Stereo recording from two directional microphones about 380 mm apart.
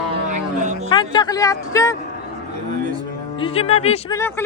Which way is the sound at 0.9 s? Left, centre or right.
Centre.